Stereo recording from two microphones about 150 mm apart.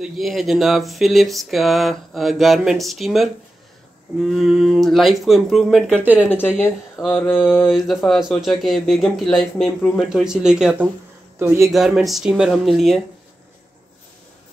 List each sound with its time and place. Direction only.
0.0 s speech: centre (ahead or behind)
5.9 s speech: 10° right (ahead or behind)
6.2 s speech: 15° left (ahead or behind)
7.0 s speech: 5° right (ahead or behind)
11.3 s speech: 15° right (ahead or behind)
11.7 s speech: centre (ahead or behind)